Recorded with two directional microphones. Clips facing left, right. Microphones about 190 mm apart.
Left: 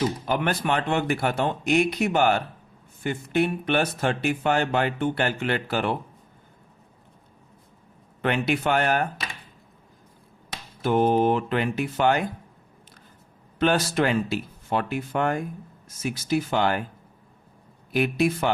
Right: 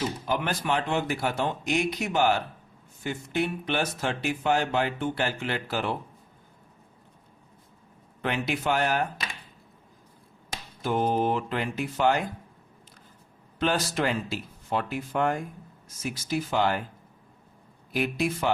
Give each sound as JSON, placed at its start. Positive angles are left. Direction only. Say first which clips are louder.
{"t": 0.3, "sound": "speech", "louder": "even", "side_deg": 55}
{"t": 8.2, "sound": "speech", "louder": "left 5 dB", "side_deg": 60}
{"t": 10.8, "sound": "speech", "louder": "left 5 dB", "side_deg": 65}
{"t": 13.6, "sound": "speech", "louder": "left 4 dB", "side_deg": 60}
{"t": 16.5, "sound": "speech", "louder": "right 1 dB", "side_deg": 60}
{"t": 17.9, "sound": "speech", "louder": "left 5 dB", "side_deg": 60}